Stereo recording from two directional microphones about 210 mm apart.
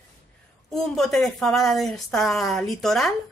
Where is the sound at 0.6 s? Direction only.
Centre (ahead or behind).